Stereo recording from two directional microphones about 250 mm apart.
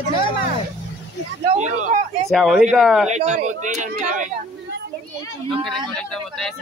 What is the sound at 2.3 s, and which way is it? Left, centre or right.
Speech, centre.